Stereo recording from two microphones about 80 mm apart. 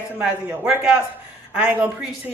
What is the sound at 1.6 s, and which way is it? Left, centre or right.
Speech, centre.